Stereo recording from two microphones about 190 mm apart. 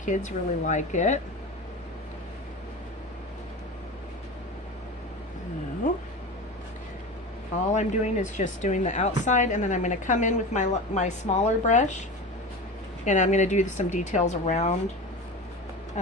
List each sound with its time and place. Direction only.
0.3 s speech: 40° left (ahead or behind)
7.7 s speech: 35° left (ahead or behind)
13.1 s speech: 40° left (ahead or behind)